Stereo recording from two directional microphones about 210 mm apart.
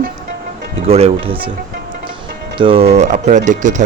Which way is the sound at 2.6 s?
25° right (ahead or behind).